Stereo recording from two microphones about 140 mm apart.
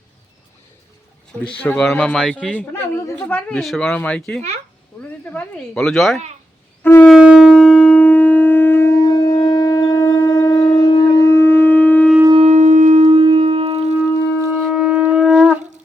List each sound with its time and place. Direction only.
1.5 s speech: 10° left (ahead or behind)
6.8 s shofar: 15° left (ahead or behind)
7.1 s shofar: 5° right (ahead or behind)
7.7 s shofar: 10° left (ahead or behind)
12.3 s shofar: 50° right (ahead or behind)
14.4 s shofar: 5° right (ahead or behind)